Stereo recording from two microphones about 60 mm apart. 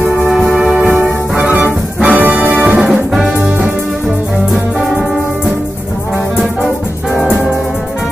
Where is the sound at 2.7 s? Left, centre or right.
Centre.